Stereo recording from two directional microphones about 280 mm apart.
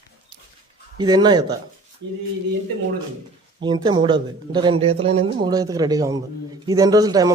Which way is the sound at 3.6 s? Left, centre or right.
Centre.